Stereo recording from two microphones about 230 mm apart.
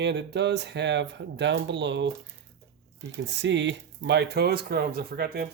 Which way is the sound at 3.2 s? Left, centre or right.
Right.